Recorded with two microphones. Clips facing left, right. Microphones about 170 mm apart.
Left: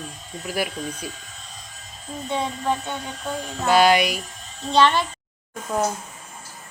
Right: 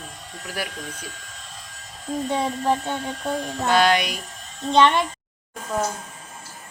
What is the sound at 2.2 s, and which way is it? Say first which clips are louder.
Speech: right 1 dB; 35° right (ahead or behind).